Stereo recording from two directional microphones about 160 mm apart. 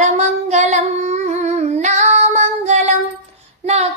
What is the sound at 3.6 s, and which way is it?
Child singing, 45° right (ahead or behind).